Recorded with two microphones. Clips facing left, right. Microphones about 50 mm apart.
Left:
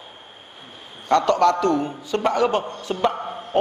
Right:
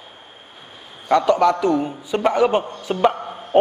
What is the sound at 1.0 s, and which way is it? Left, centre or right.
A man's voice, centre.